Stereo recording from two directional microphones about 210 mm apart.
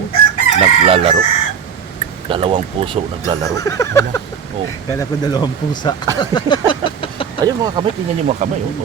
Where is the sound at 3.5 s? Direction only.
15° left (ahead or behind).